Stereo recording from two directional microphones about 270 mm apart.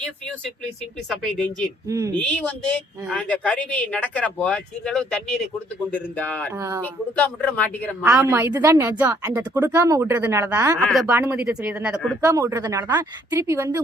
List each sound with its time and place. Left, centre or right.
1.2 s speech: centre
6.5 s speech: centre
6.8 s speech: centre
8.0 s speech: centre